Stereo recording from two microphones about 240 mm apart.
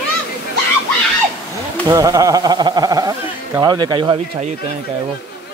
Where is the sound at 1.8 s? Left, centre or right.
Centre.